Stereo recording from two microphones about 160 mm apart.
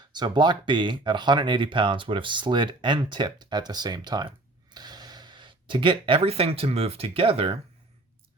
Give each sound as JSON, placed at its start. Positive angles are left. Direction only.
{"t": 0.1, "sound": "speech", "side_deg": -25}